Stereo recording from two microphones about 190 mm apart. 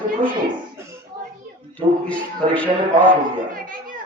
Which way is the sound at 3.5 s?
45° right (ahead or behind).